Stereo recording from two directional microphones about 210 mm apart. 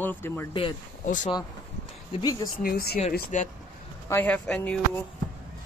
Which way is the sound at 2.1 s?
20° left (ahead or behind).